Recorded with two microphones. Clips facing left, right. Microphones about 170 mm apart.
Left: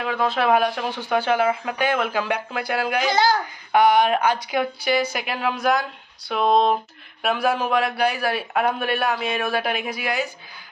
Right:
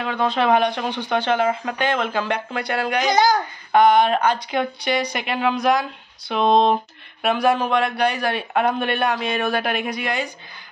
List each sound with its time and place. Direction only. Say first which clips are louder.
0.0 s speech: right 1 dB; 5° left (ahead or behind)
3.1 s a child's voice: right 3 dB; 15° right (ahead or behind)
3.7 s speech: right 2 dB; 10° left (ahead or behind)